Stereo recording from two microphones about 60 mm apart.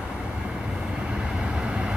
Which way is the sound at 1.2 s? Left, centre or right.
Centre.